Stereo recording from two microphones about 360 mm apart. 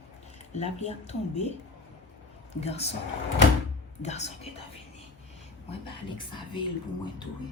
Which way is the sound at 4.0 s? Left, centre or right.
Centre.